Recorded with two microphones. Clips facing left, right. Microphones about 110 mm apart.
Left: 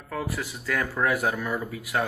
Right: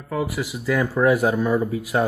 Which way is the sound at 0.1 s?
10° right (ahead or behind).